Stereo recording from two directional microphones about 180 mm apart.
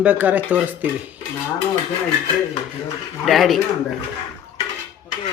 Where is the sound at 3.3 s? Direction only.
Centre (ahead or behind).